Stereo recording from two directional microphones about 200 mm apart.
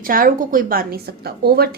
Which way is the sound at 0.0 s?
45° right (ahead or behind).